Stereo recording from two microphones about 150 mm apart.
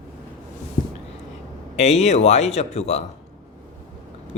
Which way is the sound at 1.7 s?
50° left (ahead or behind).